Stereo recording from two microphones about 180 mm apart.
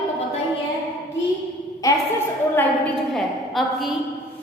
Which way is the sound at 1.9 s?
15° left (ahead or behind).